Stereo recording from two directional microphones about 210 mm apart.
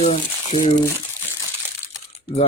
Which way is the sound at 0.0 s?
30° left (ahead or behind).